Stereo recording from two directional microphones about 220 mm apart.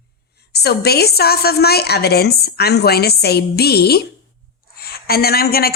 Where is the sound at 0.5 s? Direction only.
50° left (ahead or behind).